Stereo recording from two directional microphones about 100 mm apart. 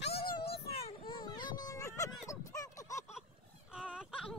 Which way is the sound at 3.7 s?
5° right (ahead or behind).